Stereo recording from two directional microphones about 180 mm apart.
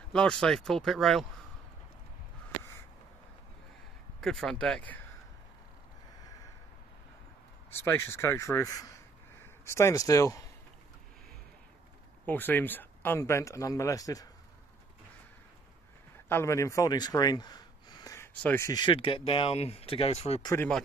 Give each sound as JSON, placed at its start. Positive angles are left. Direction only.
{"t": 0.1, "sound": "speech", "side_deg": 5}
{"t": 4.2, "sound": "speech", "side_deg": 0}
{"t": 7.7, "sound": "speech", "side_deg": 15}
{"t": 12.3, "sound": "speech", "side_deg": 10}
{"t": 16.3, "sound": "speech", "side_deg": 15}
{"t": 20.4, "sound": "speech", "side_deg": 15}